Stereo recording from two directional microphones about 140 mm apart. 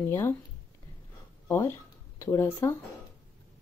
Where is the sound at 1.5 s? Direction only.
15° left (ahead or behind).